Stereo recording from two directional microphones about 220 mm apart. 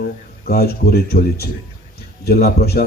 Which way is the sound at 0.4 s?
45° left (ahead or behind).